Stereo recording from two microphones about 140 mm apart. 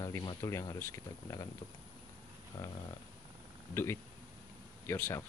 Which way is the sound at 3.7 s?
15° left (ahead or behind).